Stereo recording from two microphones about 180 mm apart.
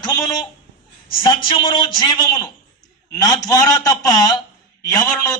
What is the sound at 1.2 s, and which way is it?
A man's voice, 30° left (ahead or behind).